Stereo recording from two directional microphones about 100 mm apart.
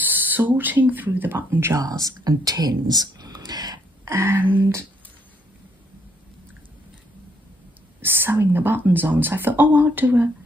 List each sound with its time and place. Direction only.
0.0 s speech: 20° right (ahead or behind)
1.8 s speech: 35° right (ahead or behind)
4.0 s speech: 25° right (ahead or behind)
8.0 s speech: 20° right (ahead or behind)